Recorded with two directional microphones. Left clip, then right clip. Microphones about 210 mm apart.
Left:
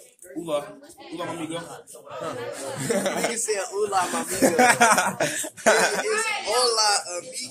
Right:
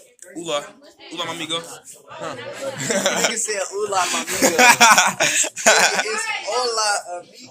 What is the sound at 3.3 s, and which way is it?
Speech, 30° right (ahead or behind).